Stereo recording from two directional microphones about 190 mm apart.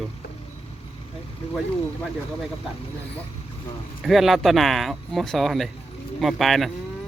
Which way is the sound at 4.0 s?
Centre (ahead or behind).